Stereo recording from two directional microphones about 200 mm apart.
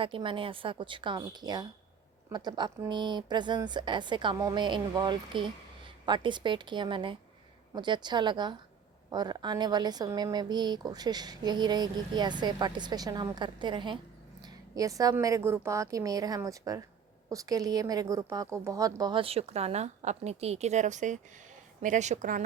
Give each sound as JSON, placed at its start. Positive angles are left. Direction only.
{"t": 0.0, "sound": "a woman's voice", "side_deg": -25}